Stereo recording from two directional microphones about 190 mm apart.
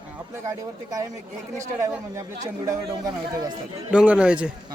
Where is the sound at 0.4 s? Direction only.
20° right (ahead or behind).